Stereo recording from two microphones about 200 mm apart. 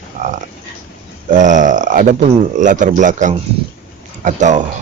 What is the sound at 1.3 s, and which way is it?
Speech, 40° right (ahead or behind).